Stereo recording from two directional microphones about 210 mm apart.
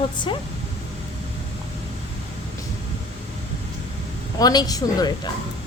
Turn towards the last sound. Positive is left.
turn(degrees=20)  # may be behind; listen again after turning